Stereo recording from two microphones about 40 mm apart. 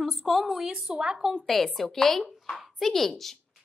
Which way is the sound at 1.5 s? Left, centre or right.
Centre.